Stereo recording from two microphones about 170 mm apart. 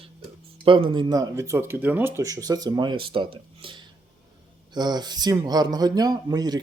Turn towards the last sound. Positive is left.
turn(degrees=-25)  # may be behind; listen again after turning